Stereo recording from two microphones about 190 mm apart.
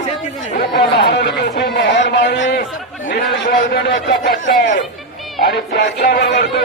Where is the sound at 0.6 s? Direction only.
60° left (ahead or behind).